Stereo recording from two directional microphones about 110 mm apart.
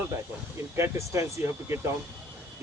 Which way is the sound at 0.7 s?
25° right (ahead or behind).